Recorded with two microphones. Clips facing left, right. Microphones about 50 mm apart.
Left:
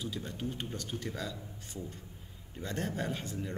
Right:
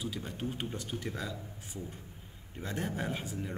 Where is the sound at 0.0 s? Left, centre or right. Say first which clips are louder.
Even; centre.